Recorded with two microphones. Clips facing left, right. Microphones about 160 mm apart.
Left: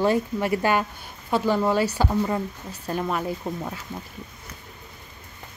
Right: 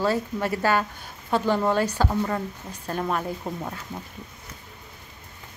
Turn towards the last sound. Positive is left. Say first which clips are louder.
# left 2 dB
turn(degrees=0)  # may be behind; listen again after turning